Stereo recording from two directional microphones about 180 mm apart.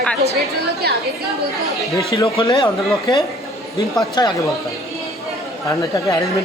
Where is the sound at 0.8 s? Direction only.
60° right (ahead or behind).